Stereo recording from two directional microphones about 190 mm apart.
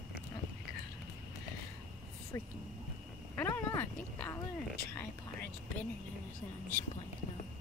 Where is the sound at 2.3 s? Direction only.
15° left (ahead or behind).